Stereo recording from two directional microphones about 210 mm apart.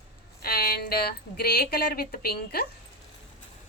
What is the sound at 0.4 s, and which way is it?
Speech, 45° left (ahead or behind).